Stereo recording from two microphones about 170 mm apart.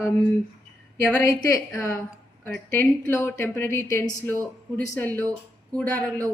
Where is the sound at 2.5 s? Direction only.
15° left (ahead or behind).